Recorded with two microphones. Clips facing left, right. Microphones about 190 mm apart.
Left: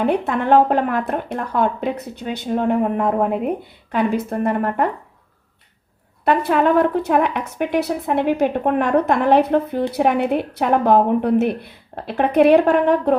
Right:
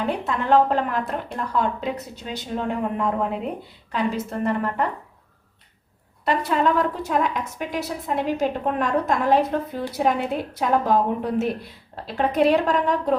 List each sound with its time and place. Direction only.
0.0 s speech: 55° left (ahead or behind)
6.2 s speech: 60° left (ahead or behind)